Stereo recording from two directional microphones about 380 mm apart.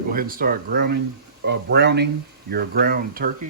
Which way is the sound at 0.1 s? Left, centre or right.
Right.